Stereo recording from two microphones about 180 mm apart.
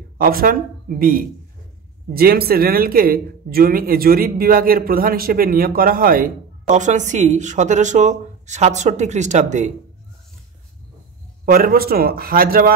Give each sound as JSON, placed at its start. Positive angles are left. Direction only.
{"t": 0.2, "sound": "speech", "side_deg": -55}
{"t": 11.4, "sound": "speech", "side_deg": -55}